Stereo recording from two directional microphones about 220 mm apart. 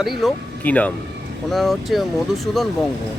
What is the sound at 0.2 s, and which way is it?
Speech, centre (ahead or behind).